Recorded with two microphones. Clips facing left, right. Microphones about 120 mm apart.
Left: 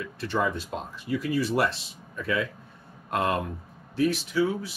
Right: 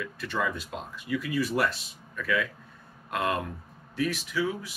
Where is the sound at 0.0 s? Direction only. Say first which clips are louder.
Left 3 dB; 30° left (ahead or behind).